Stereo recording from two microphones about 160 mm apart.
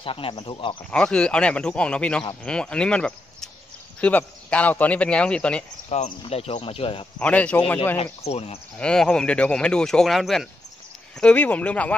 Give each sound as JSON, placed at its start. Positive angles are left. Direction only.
{"t": 0.0, "sound": "speech", "side_deg": 35}
{"t": 0.8, "sound": "speech", "side_deg": 5}
{"t": 6.0, "sound": "speech", "side_deg": 40}
{"t": 7.2, "sound": "speech", "side_deg": 10}
{"t": 8.0, "sound": "speech", "side_deg": 40}
{"t": 8.7, "sound": "speech", "side_deg": 5}